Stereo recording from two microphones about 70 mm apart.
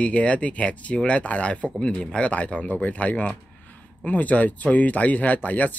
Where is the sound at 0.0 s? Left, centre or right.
Centre.